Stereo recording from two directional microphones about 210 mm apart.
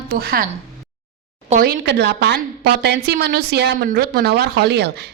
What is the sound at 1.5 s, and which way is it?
A woman's voice, 40° right (ahead or behind).